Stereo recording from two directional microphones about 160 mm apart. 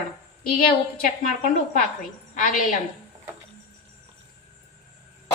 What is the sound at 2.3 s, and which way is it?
Speech, 55° left (ahead or behind).